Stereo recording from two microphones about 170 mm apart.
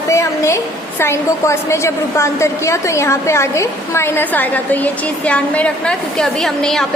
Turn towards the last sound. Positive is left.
turn(degrees=5)  # may be behind; listen again after turning